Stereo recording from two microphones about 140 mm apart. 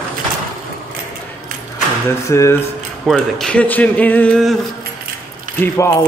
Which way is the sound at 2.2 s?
20° left (ahead or behind).